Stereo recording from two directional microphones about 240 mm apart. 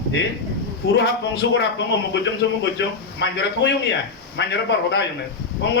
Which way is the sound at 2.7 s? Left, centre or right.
Left.